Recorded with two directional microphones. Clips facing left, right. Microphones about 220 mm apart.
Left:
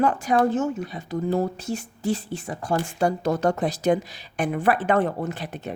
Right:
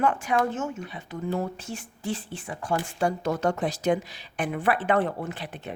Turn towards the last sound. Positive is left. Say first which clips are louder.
# left 4 dB
turn(degrees=40)  # may be behind; listen again after turning